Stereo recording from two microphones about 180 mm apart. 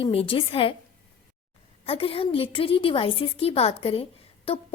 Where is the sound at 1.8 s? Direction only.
30° left (ahead or behind).